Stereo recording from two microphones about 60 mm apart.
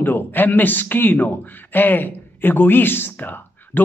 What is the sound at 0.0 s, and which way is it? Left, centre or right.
A man's voice, left.